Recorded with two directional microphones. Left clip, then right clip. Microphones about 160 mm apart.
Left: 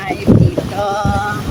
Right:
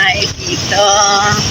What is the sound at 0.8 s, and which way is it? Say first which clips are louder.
Music: right 9 dB; 5° left (ahead or behind).